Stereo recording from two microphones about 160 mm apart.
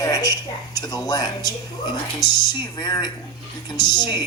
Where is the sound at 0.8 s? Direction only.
25° left (ahead or behind).